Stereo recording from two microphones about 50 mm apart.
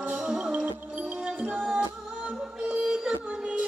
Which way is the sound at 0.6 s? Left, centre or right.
Right.